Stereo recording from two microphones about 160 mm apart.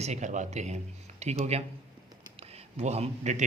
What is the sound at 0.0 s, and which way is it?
A man's voice, 45° right (ahead or behind).